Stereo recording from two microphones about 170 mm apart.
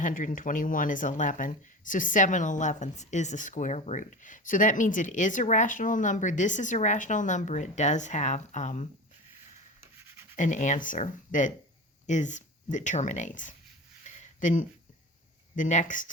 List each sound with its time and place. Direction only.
0.0 s speech: 50° left (ahead or behind)
10.3 s speech: 45° left (ahead or behind)
14.2 s a sound: 50° left (ahead or behind)
15.5 s speech: 50° left (ahead or behind)